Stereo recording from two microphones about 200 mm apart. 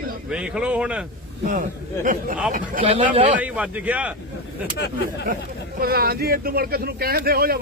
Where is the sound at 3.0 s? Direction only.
40° right (ahead or behind).